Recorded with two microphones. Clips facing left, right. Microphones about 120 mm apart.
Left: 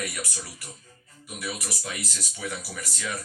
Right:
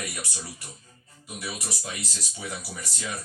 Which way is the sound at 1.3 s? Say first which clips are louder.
Left 1 dB; 25° right (ahead or behind).